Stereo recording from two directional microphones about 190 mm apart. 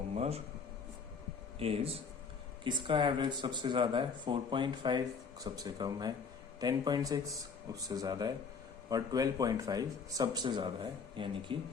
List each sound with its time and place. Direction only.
0.2 s speech: 35° right (ahead or behind)
1.5 s speech: 30° right (ahead or behind)